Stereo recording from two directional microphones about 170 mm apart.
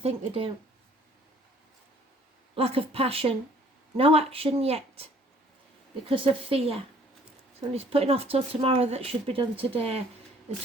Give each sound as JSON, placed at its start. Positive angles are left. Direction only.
{"t": 0.0, "sound": "speech", "side_deg": -35}
{"t": 2.6, "sound": "speech", "side_deg": -35}
{"t": 6.1, "sound": "speech", "side_deg": -30}